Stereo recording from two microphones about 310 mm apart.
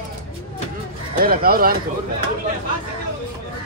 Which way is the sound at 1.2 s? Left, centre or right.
Right.